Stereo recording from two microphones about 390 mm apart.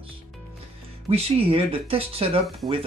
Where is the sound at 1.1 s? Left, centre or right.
Centre.